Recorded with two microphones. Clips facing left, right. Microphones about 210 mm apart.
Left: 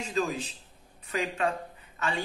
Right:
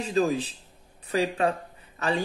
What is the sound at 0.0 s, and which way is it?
Speech, 35° right (ahead or behind).